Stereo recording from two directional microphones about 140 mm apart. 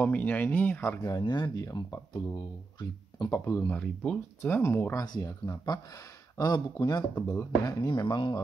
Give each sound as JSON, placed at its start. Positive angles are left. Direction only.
{"t": 0.0, "sound": "speech", "side_deg": 10}
{"t": 3.8, "sound": "speech", "side_deg": 10}